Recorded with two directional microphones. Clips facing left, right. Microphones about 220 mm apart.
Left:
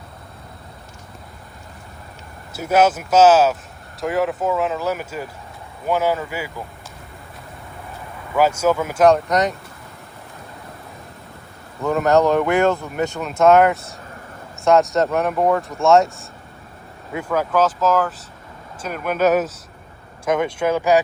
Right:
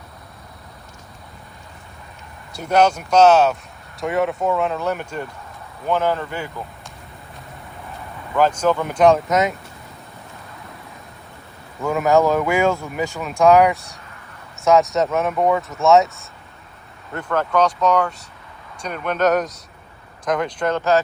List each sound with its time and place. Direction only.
2.5 s speech: 5° left (ahead or behind)
8.4 s speech: 10° left (ahead or behind)
11.8 s speech: centre (ahead or behind)